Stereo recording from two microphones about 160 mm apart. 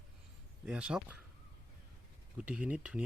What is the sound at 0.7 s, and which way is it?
Speech, 5° right (ahead or behind).